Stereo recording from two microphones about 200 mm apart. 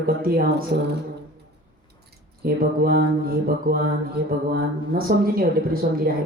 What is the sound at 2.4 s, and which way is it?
Speech, 50° right (ahead or behind).